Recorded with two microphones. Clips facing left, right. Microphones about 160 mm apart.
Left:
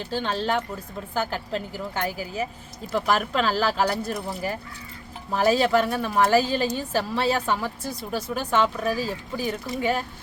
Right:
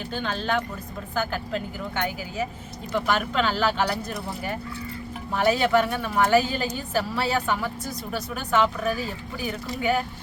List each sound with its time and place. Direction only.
0.1 s speech: 30° left (ahead or behind)